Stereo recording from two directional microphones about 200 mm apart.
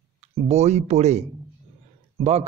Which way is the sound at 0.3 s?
35° right (ahead or behind).